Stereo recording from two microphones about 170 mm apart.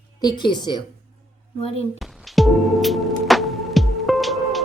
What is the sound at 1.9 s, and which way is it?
Music, centre (ahead or behind).